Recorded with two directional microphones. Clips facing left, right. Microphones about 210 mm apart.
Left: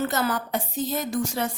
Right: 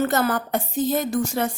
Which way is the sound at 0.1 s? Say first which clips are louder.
Right 4 dB; 50° right (ahead or behind).